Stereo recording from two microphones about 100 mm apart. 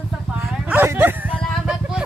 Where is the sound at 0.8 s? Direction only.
20° right (ahead or behind).